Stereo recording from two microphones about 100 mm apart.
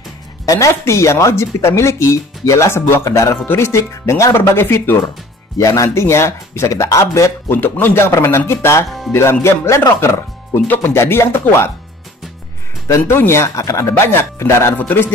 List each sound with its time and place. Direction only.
0.5 s speech: 30° left (ahead or behind)
12.8 s speech: 25° left (ahead or behind)